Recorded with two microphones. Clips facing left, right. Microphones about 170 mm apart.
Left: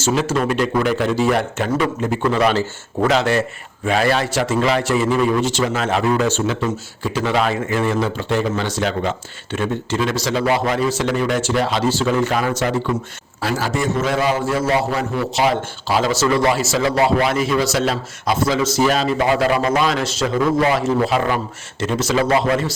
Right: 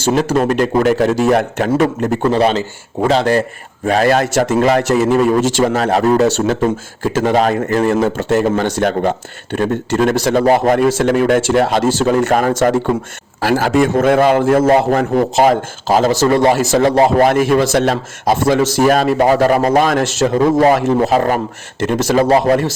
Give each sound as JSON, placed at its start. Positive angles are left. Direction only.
{"t": 0.1, "sound": "a man's voice", "side_deg": -45}
{"t": 2.2, "sound": "speech", "side_deg": -30}
{"t": 3.1, "sound": "a man's voice", "side_deg": -35}
{"t": 13.4, "sound": "a man's voice", "side_deg": -60}